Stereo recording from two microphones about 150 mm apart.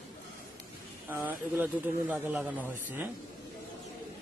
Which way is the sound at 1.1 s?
10° right (ahead or behind).